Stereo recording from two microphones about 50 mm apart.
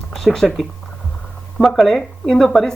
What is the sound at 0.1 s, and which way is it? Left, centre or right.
A woman's voice, centre.